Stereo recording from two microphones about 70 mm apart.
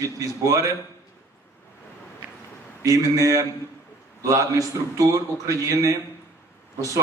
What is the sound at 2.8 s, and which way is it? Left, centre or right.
A man's voice, right.